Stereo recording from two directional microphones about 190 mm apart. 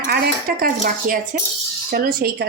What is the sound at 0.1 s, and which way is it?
Speech, 50° right (ahead or behind).